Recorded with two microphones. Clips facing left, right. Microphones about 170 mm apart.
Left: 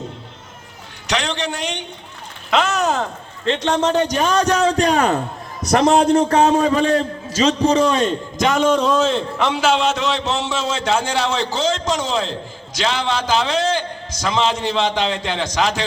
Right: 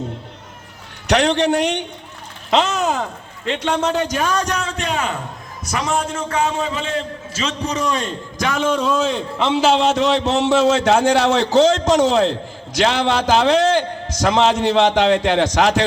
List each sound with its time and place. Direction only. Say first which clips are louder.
1.0 s a man's voice: right 7 dB; 55° right (ahead or behind)
2.5 s a man's voice: even; 25° right (ahead or behind)
3.9 s a man's voice: left 3 dB; 20° left (ahead or behind)
8.9 s a man's voice: left 2 dB; 15° right (ahead or behind); by 15.8 s 65° right (ahead or behind)